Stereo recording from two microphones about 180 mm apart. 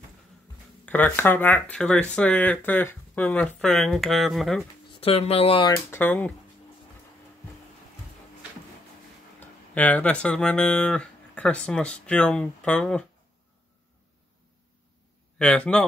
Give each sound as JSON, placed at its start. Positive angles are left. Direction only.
{"t": 0.8, "sound": "speech", "side_deg": 10}
{"t": 4.9, "sound": "speech", "side_deg": 35}
{"t": 5.9, "sound": "speech", "side_deg": 10}
{"t": 9.4, "sound": "speech", "side_deg": 10}
{"t": 15.3, "sound": "speech", "side_deg": 5}